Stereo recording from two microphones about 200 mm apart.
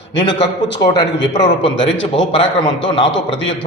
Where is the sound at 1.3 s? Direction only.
25° left (ahead or behind).